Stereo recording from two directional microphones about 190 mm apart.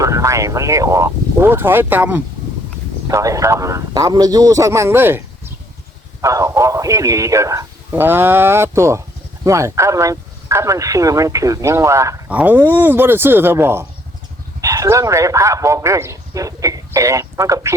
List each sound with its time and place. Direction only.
0.0 s a man's voice: 15° right (ahead or behind)
6.2 s a man's voice: 15° right (ahead or behind)